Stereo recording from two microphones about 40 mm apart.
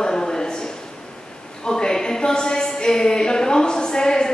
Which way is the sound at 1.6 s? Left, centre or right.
Centre.